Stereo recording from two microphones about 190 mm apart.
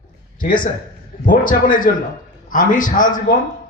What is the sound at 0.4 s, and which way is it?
A man's voice, 45° left (ahead or behind).